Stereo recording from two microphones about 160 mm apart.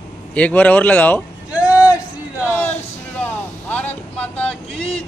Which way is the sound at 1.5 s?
10° right (ahead or behind).